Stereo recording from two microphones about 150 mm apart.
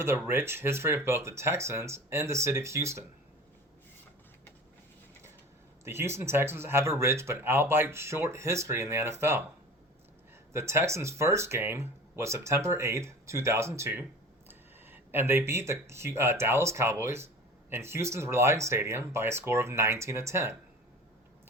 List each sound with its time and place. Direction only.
0.0 s speech: 15° right (ahead or behind)
5.8 s speech: 15° right (ahead or behind)
10.5 s speech: 20° right (ahead or behind)